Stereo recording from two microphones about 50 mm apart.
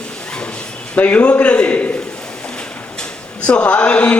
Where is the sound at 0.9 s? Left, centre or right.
Left.